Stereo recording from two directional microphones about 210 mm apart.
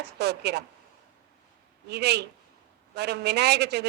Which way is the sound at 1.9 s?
50° right (ahead or behind).